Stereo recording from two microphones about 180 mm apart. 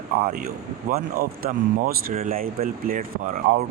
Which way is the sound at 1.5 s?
45° right (ahead or behind).